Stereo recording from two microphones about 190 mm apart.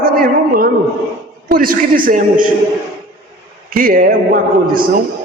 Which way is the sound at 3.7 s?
50° right (ahead or behind).